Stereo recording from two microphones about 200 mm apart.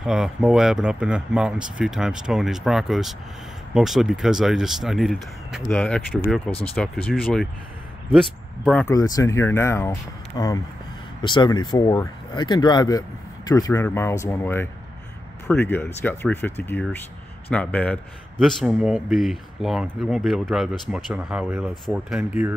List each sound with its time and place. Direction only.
0.0 s speech: 5° right (ahead or behind)
8.9 s speech: 15° left (ahead or behind); by 22.5 s 5° right (ahead or behind)